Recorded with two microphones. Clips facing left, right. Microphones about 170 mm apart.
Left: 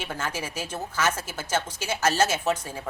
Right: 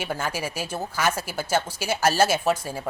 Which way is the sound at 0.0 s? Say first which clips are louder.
Right 3 dB; 10° right (ahead or behind).